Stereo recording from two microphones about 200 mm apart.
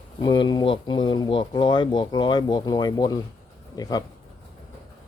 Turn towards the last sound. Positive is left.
turn(degrees=20)  # may be behind; listen again after turning